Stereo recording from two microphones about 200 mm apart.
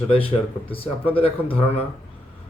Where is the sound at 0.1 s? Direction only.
25° left (ahead or behind).